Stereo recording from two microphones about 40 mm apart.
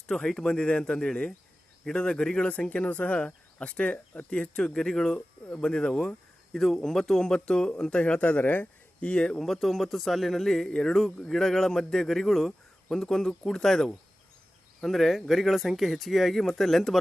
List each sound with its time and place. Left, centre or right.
0.1 s a man's voice: centre
2.5 s speech: left
4.7 s a man's voice: centre; by 8.4 s left
8.4 s speech: left
9.0 s speech: left
9.4 s a man's voice: centre
14.8 s speech: centre